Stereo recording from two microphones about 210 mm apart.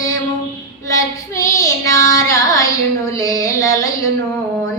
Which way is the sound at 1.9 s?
15° left (ahead or behind).